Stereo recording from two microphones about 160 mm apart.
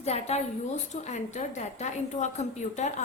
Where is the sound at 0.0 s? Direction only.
40° left (ahead or behind).